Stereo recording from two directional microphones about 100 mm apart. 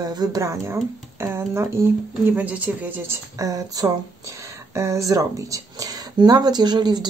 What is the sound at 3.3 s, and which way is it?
Speech, 35° right (ahead or behind).